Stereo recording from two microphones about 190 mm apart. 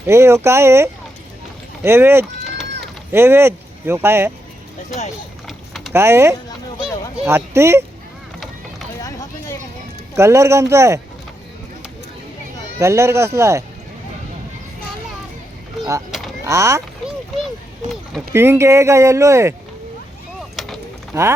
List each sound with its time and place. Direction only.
0.1 s speech: 15° right (ahead or behind)
5.5 s vehicle: centre (ahead or behind)
5.9 s speech: 15° right (ahead or behind)
9.0 s a sound: 15° left (ahead or behind)
10.2 s speech: 15° right (ahead or behind)
12.8 s speech: 15° right (ahead or behind)
15.8 s speech: 15° right (ahead or behind)
17.1 s a sound: centre (ahead or behind)
18.3 s speech: 15° right (ahead or behind)
20.6 s a sound: centre (ahead or behind)
21.1 s speech: 15° right (ahead or behind)